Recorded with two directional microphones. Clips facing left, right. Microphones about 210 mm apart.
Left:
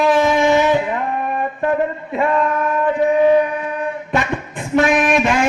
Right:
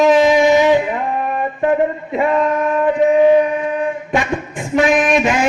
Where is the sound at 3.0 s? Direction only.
20° right (ahead or behind).